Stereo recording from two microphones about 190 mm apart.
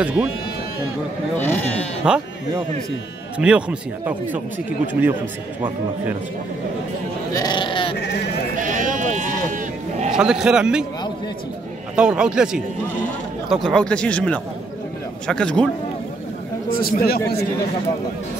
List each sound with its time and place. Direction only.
0.0 s speech: 5° right (ahead or behind)
1.4 s speech: 10° left (ahead or behind)
2.0 s speech: 5° right (ahead or behind)
3.3 s speech: 5° right (ahead or behind)
7.3 s speech: 25° left (ahead or behind)
8.5 s sheep: 45° right (ahead or behind)
10.1 s speech: 5° right (ahead or behind)
11.9 s speech: 5° right (ahead or behind)
16.7 s speech: 50° left (ahead or behind)